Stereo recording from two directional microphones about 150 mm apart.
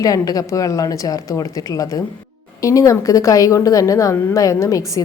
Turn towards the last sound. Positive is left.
turn(degrees=20)  # may be behind; listen again after turning